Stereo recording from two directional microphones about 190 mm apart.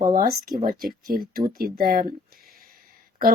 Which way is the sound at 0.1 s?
50° right (ahead or behind).